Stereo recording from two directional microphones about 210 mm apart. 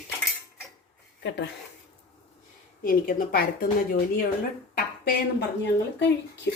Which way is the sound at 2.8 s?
45° left (ahead or behind).